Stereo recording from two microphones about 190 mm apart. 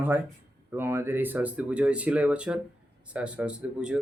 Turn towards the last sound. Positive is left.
turn(degrees=-5)  # may be behind; listen again after turning